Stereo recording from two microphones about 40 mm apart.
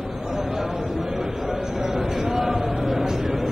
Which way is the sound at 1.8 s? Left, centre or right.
Centre.